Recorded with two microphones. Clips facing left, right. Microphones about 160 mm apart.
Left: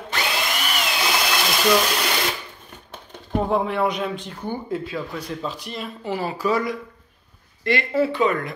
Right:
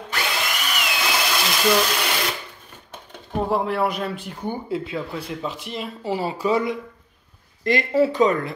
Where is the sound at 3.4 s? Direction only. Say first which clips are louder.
Even; 5° right (ahead or behind); by 6.8 s 25° right (ahead or behind).